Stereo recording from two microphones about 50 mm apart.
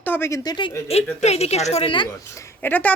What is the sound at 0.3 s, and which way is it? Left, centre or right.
Speech, left.